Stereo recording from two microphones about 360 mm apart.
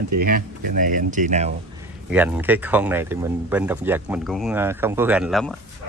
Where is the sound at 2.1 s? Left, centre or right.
Centre.